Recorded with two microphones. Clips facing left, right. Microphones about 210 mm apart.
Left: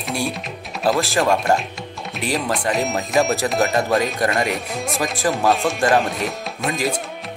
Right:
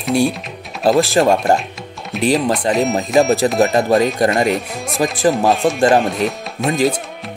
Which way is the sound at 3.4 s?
25° right (ahead or behind).